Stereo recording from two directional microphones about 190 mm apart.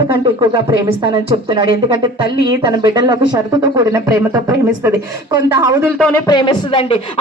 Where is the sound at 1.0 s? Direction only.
25° right (ahead or behind).